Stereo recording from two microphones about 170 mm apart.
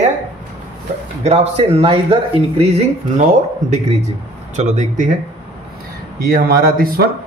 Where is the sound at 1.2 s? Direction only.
35° right (ahead or behind).